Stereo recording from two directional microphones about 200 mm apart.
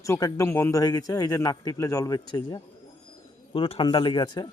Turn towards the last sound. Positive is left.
turn(degrees=20)  # may be behind; listen again after turning